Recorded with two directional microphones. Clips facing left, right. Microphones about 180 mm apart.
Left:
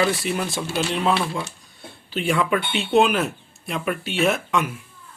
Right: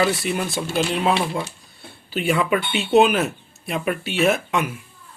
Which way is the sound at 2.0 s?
5° right (ahead or behind).